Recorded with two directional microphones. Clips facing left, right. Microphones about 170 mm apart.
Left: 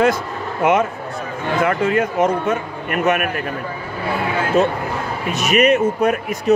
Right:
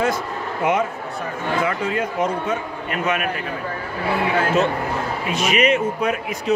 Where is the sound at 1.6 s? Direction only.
65° left (ahead or behind).